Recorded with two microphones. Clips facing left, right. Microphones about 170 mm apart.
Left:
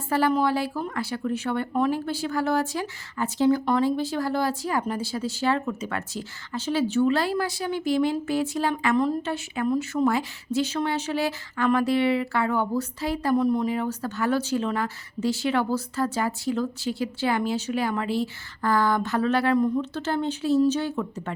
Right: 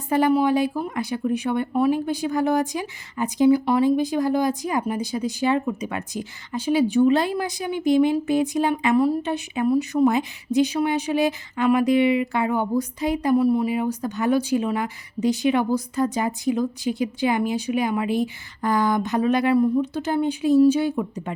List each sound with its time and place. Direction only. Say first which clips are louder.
0.1 s speech: right 4 dB; 15° right (ahead or behind)